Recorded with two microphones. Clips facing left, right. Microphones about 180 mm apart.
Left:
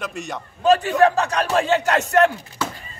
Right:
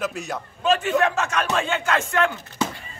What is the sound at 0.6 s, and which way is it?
A man's voice, 35° left (ahead or behind).